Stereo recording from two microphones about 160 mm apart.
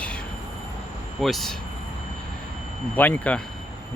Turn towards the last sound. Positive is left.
turn(degrees=10)  # may be behind; listen again after turning